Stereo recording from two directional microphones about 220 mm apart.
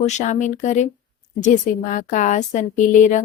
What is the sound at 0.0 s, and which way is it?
Speech, 30° left (ahead or behind).